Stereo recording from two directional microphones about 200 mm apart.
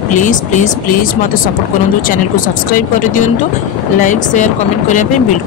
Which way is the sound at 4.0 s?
40° left (ahead or behind).